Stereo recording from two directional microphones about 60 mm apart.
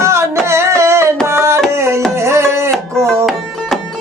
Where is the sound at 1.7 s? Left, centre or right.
Right.